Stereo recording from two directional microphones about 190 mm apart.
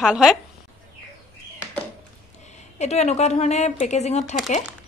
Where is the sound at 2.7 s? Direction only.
35° left (ahead or behind).